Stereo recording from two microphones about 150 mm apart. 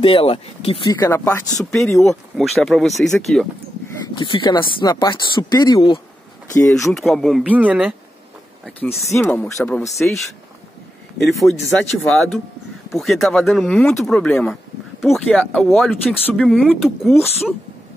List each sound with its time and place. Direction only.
0.0 s speech: 35° left (ahead or behind)
0.8 s speech: 20° left (ahead or behind)
1.6 s speech: 5° left (ahead or behind)
4.2 s speech: 30° left (ahead or behind)
6.7 s speech: centre (ahead or behind)
8.7 s speech: 15° left (ahead or behind)
9.9 s speech: centre (ahead or behind)